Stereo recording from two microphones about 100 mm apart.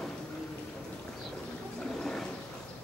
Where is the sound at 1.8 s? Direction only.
5° left (ahead or behind).